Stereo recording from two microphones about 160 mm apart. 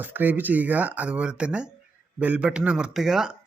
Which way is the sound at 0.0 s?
10° right (ahead or behind).